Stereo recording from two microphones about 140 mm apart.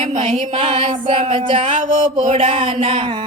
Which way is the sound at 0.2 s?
50° right (ahead or behind).